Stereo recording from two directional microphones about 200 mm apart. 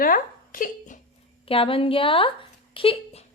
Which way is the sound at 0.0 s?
45° left (ahead or behind).